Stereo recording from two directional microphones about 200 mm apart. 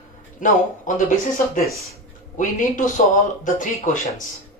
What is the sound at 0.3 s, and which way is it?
Speech, 40° left (ahead or behind).